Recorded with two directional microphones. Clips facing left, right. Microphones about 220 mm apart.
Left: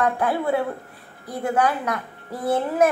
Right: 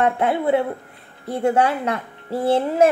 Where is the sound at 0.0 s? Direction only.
25° right (ahead or behind).